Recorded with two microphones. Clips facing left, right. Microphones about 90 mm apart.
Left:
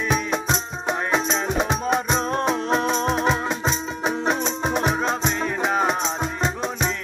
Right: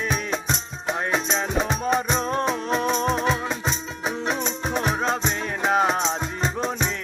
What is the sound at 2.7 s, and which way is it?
Music, 25° left (ahead or behind).